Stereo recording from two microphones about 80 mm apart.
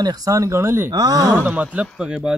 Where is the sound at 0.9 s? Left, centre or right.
Right.